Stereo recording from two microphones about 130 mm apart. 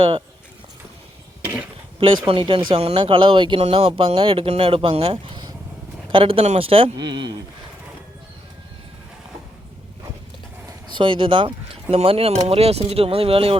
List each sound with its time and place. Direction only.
2.2 s speech: 45° right (ahead or behind)
10.8 s speech: 40° right (ahead or behind)